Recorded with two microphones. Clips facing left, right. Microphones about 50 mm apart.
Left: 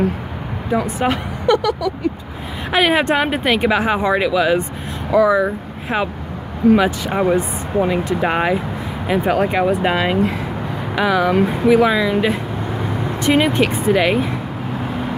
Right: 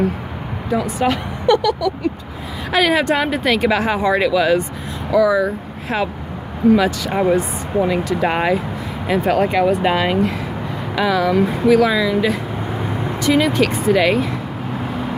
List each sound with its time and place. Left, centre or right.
0.7 s speech: left; by 4.6 s centre
5.1 s speech: left
7.1 s speech: centre
7.3 s speech: centre